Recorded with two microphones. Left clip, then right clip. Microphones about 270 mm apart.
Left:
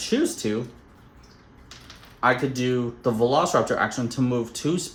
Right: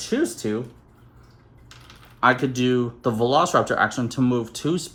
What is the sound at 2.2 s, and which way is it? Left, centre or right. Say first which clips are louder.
Speech: right 2 dB; right.